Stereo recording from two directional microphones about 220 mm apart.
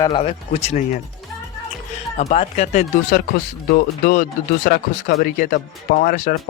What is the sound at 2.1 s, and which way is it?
Speech, 30° left (ahead or behind).